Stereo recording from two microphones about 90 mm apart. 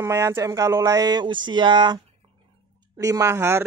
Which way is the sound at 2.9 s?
40° right (ahead or behind).